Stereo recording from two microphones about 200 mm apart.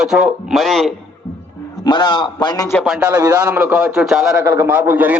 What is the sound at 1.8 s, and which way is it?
Speech, 20° left (ahead or behind).